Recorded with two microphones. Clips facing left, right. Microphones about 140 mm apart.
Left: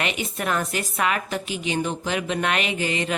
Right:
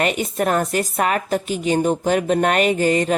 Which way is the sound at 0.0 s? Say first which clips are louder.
Right 7 dB; 45° right (ahead or behind).